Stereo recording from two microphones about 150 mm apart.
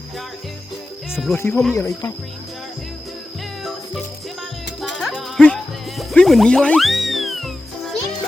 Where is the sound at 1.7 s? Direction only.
20° left (ahead or behind).